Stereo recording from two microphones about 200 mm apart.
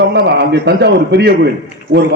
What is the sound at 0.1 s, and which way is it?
A man's voice, 60° right (ahead or behind).